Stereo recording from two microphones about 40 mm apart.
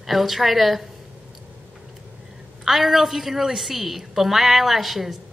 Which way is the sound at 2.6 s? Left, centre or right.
Centre.